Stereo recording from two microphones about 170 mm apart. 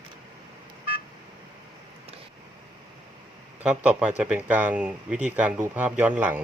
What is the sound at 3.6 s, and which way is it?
Speech, 5° right (ahead or behind).